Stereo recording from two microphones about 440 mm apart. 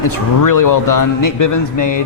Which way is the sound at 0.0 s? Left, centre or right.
Left.